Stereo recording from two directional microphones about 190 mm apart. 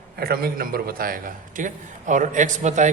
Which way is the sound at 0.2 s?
50° right (ahead or behind).